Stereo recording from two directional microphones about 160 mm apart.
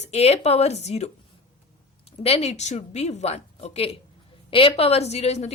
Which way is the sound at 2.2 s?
40° left (ahead or behind).